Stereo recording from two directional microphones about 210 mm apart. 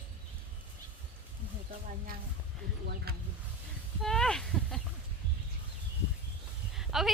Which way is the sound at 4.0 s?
5° left (ahead or behind).